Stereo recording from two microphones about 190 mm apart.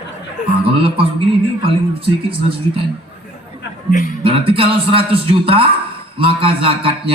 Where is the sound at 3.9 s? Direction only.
45° left (ahead or behind).